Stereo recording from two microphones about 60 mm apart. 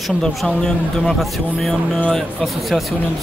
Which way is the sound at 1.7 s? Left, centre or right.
Centre.